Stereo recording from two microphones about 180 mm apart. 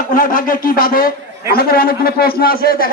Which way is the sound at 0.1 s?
50° left (ahead or behind).